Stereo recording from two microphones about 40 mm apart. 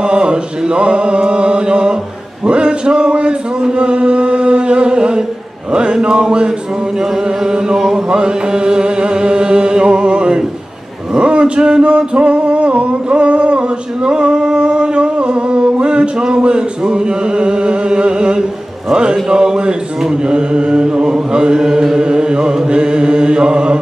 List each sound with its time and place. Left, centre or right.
0.0 s mantra: right
2.4 s chant: right
5.7 s a sound: right
7.4 s music: centre
11.1 s a sound: right
18.9 s chant: right